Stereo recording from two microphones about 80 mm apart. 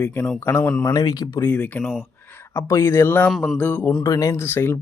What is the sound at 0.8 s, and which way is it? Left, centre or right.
Speech, left.